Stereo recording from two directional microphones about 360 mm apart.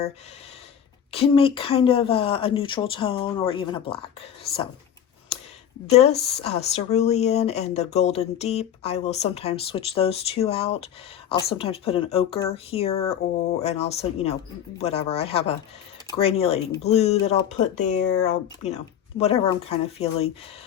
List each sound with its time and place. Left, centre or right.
1.1 s speech: centre
4.5 s speech: left
5.9 s speech: centre